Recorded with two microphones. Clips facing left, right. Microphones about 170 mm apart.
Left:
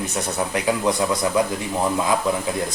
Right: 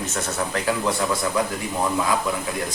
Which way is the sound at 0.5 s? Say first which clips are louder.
Left 3 dB; 15° left (ahead or behind).